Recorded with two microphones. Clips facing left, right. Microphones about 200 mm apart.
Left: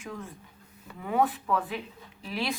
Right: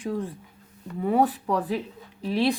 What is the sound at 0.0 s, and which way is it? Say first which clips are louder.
Speech: right 10 dB; 35° right (ahead or behind).